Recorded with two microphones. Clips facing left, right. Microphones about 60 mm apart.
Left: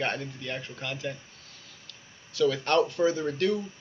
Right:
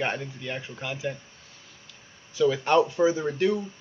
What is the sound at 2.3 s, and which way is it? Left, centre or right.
A man's voice, centre.